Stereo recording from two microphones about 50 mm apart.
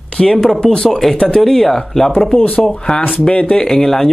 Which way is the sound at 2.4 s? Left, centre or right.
Left.